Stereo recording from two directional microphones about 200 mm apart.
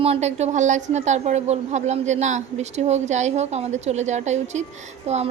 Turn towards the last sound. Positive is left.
turn(degrees=-35)  # may be behind; listen again after turning